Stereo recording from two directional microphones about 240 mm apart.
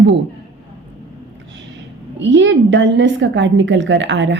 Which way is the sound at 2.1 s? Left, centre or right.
Right.